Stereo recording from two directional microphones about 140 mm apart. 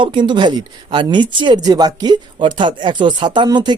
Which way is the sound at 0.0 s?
35° right (ahead or behind).